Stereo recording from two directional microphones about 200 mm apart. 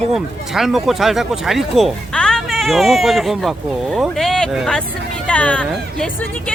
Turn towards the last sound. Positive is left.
turn(degrees=5)  # may be behind; listen again after turning